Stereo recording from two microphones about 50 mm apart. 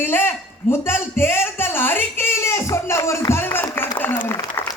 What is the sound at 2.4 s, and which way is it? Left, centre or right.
Speech, left.